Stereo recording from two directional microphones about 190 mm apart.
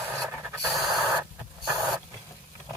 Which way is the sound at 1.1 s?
20° right (ahead or behind).